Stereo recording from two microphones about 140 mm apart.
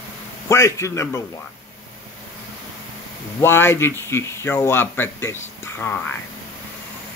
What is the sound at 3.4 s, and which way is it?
A man's voice, 15° left (ahead or behind).